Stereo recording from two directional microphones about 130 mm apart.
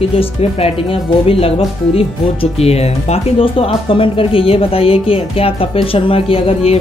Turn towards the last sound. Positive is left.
turn(degrees=45)  # may be behind; listen again after turning